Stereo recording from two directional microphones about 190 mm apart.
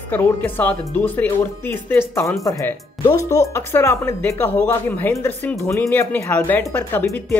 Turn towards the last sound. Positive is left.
turn(degrees=10)  # may be behind; listen again after turning